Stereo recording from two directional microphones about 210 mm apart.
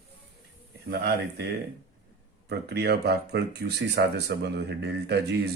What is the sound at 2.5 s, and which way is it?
Speech, 50° right (ahead or behind).